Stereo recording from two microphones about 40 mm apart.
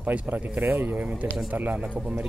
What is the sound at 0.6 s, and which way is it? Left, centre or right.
Speech, right.